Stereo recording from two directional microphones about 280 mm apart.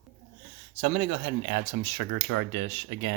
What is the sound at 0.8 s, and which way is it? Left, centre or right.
Speech, right.